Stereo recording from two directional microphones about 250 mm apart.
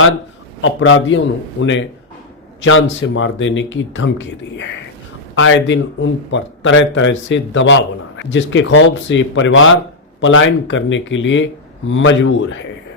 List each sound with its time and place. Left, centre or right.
0.6 s speech: left